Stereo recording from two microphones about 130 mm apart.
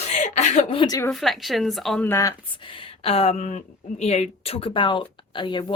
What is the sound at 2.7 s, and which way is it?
Speech, 45° left (ahead or behind).